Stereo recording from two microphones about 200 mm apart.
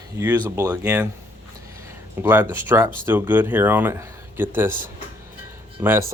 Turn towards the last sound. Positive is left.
turn(degrees=-10)  # may be behind; listen again after turning